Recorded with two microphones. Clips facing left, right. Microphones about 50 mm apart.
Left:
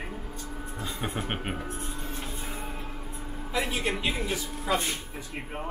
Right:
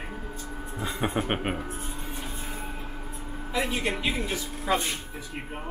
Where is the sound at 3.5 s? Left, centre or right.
Centre.